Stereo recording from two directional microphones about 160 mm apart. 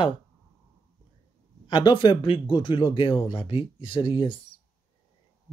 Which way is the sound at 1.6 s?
30° left (ahead or behind).